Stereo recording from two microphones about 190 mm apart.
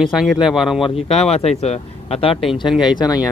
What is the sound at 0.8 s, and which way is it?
Speech, 30° left (ahead or behind).